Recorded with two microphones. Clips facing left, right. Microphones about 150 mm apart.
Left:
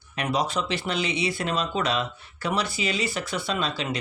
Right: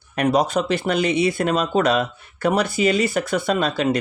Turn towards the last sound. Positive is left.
turn(degrees=-50)  # may be behind; listen again after turning